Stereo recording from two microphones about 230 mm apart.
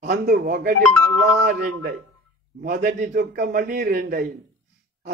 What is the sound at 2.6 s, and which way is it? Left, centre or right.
Speech, right.